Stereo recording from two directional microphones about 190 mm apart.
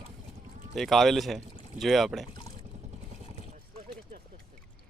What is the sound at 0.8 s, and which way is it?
Speech, centre (ahead or behind).